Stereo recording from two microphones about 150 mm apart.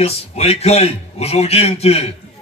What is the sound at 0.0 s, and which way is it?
A man's voice, 45° left (ahead or behind).